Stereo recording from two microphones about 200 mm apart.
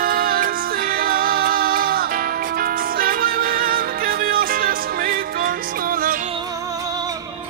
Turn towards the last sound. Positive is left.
turn(degrees=-45)  # may be behind; listen again after turning